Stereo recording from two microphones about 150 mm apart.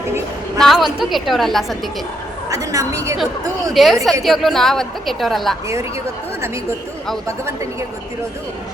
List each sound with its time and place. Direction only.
0.6 s a woman's voice: centre (ahead or behind)
2.5 s a woman's voice: 20° right (ahead or behind)
3.8 s a woman's voice: centre (ahead or behind)
7.3 s a woman's voice: 20° right (ahead or behind)